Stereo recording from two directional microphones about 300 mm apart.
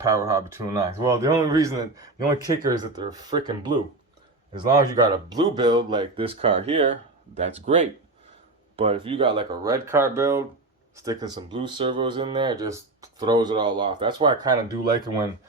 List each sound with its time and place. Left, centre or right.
0.0 s speech: centre
5.0 s speech: centre